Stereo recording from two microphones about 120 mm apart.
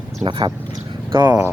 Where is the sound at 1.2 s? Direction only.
15° right (ahead or behind).